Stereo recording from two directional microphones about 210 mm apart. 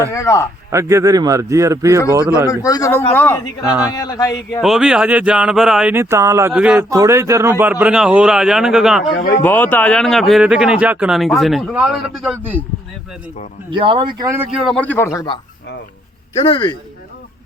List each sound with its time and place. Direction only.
0.1 s speech: 15° left (ahead or behind)
0.7 s a man's voice: 15° right (ahead or behind)
2.6 s speech: 15° left (ahead or behind)
4.6 s speech: centre (ahead or behind)
9.1 s speech: 45° left (ahead or behind)
9.4 s speech: 10° left (ahead or behind)
13.7 s speech: 25° right (ahead or behind)
14.7 s speech: 5° left (ahead or behind)
16.3 s speech: 25° left (ahead or behind)